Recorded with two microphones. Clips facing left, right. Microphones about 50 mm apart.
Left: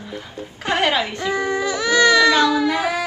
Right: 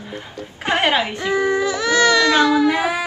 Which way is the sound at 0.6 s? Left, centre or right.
Right.